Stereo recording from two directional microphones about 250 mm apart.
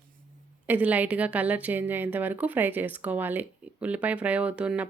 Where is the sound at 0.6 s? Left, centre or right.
Centre.